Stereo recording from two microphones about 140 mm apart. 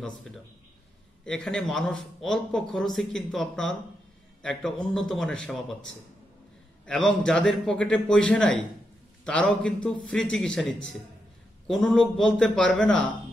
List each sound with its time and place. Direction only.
1.2 s speech: 5° left (ahead or behind)
6.9 s speech: 5° left (ahead or behind)